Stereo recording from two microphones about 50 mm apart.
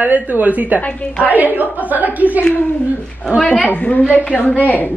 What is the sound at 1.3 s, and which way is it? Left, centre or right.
A man's voice, right.